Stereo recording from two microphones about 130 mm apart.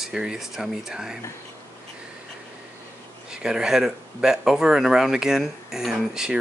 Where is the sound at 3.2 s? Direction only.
5° right (ahead or behind).